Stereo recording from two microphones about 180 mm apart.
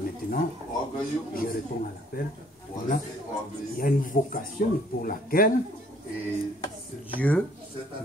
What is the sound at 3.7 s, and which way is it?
Speech, 50° left (ahead or behind).